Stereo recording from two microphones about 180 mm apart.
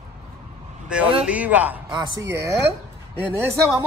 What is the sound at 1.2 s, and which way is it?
A man's voice, 10° right (ahead or behind).